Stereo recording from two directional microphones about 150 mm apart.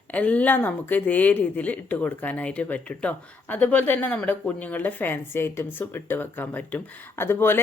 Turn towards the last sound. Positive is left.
turn(degrees=15)  # may be behind; listen again after turning